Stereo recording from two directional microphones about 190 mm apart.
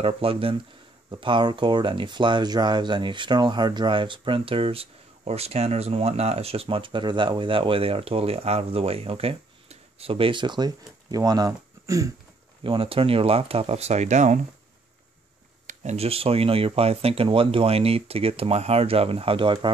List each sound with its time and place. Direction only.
0.0 s speech: 30° right (ahead or behind)
12.6 s speech: 30° right (ahead or behind)
15.6 s speech: 35° right (ahead or behind)